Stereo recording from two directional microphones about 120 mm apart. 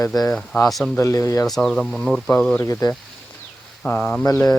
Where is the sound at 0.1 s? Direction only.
5° left (ahead or behind).